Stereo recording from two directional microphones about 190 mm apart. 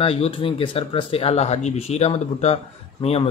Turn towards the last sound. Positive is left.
turn(degrees=30)  # may be behind; listen again after turning